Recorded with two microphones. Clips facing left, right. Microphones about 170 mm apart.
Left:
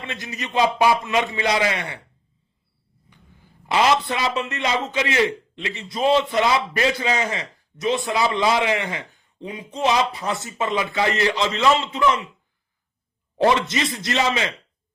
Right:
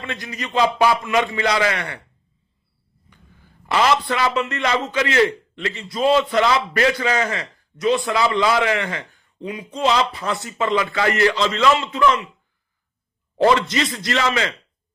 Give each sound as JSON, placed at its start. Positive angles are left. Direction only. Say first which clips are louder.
{"t": 0.0, "sound": "a man's voice", "louder": "right 2 dB", "side_deg": 25}
{"t": 3.1, "sound": "a sound", "louder": "even", "side_deg": 20}
{"t": 4.4, "sound": "a man's voice", "louder": "right 2 dB", "side_deg": 20}
{"t": 8.8, "sound": "speech", "louder": "right 2 dB", "side_deg": -50}
{"t": 9.1, "sound": "a sound", "louder": "right 3 dB", "side_deg": 25}
{"t": 9.7, "sound": "a man's voice", "louder": "right 1 dB", "side_deg": 20}
{"t": 13.4, "sound": "a man's voice", "louder": "right 2 dB", "side_deg": 20}